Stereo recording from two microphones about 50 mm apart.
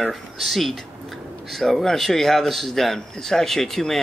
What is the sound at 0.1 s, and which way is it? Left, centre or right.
Speech, centre.